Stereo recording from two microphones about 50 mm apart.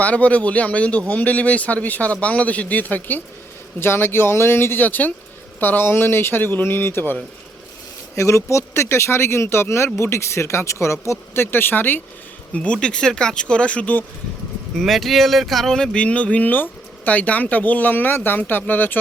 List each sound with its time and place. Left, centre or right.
0.0 s a man's voice: left
3.8 s a man's voice: left
4.8 s a man's voice: left
8.1 s speech: left
11.3 s a man's voice: left
12.5 s a man's voice: left
14.8 s speech: centre
16.0 s a man's voice: left